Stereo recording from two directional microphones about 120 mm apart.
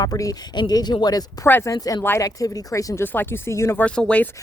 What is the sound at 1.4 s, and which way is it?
Speech, 20° left (ahead or behind).